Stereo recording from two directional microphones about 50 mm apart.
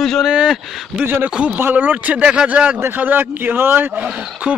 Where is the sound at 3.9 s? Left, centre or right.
Right.